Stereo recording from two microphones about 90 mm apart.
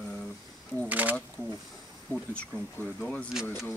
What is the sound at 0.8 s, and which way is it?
Speech, 20° right (ahead or behind).